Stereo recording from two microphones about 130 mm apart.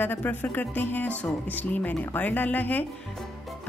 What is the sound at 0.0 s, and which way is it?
A woman's voice, 15° left (ahead or behind).